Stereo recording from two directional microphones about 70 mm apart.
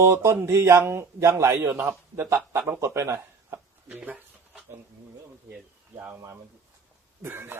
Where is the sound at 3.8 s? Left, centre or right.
Right.